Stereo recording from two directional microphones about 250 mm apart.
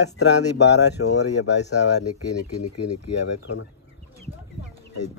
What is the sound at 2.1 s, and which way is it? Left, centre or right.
Speech, left.